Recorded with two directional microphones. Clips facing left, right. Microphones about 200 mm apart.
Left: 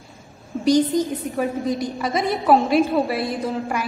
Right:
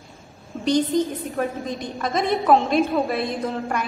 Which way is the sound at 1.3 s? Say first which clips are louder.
Left 3 dB; centre (ahead or behind).